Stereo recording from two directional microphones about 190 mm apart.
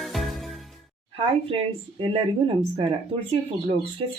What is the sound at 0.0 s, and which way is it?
Music, centre (ahead or behind).